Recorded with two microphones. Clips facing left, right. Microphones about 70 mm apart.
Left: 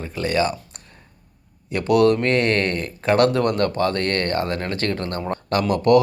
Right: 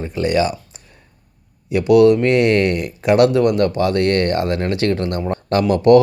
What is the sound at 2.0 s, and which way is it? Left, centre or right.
Speech, centre.